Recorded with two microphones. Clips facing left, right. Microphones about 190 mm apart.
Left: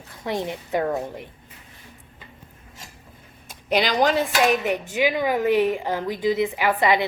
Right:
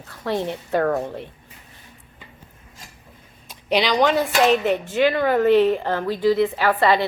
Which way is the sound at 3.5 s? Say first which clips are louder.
Right 1 dB; 50° left (ahead or behind).